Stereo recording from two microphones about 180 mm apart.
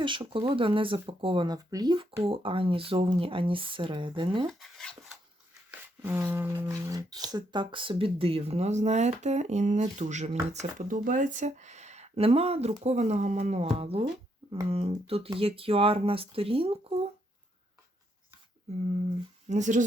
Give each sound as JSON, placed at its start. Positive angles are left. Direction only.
{"t": 0.0, "sound": "speech", "side_deg": -25}
{"t": 4.6, "sound": "a sound", "side_deg": 0}
{"t": 6.0, "sound": "speech", "side_deg": -10}
{"t": 18.7, "sound": "speech", "side_deg": -40}